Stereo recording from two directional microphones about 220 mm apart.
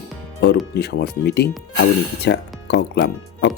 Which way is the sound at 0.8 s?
50° left (ahead or behind).